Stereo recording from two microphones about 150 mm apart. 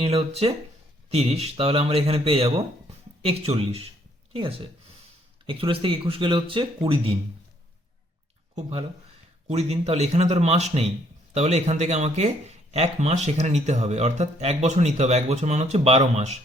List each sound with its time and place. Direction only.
0.0 s speech: 40° right (ahead or behind)
9.5 s speech: 45° right (ahead or behind)